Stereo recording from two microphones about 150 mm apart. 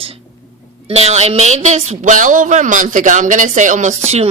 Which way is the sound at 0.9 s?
45° right (ahead or behind).